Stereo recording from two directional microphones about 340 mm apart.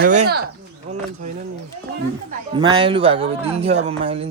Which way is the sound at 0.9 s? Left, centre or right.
Right.